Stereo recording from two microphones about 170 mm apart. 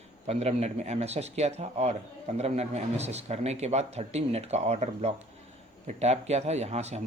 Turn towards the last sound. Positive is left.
turn(degrees=-40)  # may be behind; listen again after turning